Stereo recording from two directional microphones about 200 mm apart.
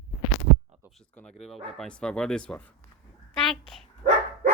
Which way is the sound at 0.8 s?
Centre (ahead or behind).